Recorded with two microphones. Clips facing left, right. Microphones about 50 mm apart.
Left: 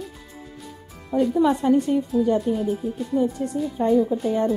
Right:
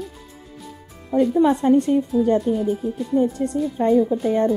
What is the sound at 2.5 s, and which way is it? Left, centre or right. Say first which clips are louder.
Speech: right 2 dB; right.